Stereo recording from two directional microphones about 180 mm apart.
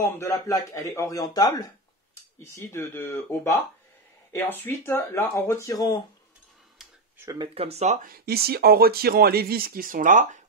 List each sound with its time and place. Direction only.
0.0 s speech: 15° left (ahead or behind)
7.2 s speech: 15° right (ahead or behind)
7.4 s speech: 35° right (ahead or behind)